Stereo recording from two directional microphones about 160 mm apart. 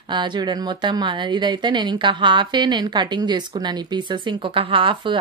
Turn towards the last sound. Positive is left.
turn(degrees=-30)  # may be behind; listen again after turning